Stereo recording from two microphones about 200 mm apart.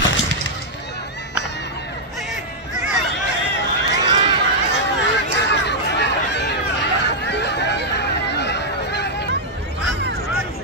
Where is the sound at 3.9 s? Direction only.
20° right (ahead or behind).